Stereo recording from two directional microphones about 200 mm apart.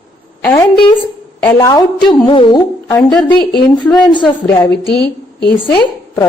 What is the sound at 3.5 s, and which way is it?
Speech, 5° left (ahead or behind).